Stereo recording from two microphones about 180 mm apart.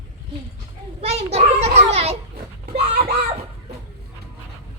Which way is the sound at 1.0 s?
35° right (ahead or behind).